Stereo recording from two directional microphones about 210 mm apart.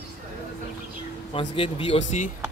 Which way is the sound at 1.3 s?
25° left (ahead or behind).